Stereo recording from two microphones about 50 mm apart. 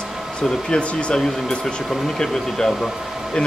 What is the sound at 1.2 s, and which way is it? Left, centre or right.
Speech, centre.